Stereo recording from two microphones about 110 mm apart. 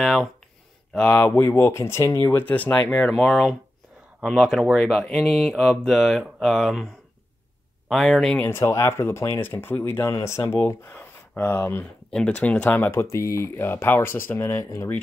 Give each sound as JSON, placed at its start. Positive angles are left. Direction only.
{"t": 0.0, "sound": "speech", "side_deg": 0}
{"t": 0.9, "sound": "speech", "side_deg": 10}
{"t": 7.9, "sound": "speech", "side_deg": 0}
{"t": 8.4, "sound": "speech", "side_deg": 20}
{"t": 12.1, "sound": "speech", "side_deg": 10}